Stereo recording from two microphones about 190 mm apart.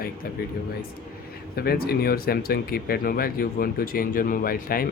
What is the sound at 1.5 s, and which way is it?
Speech, 55° left (ahead or behind).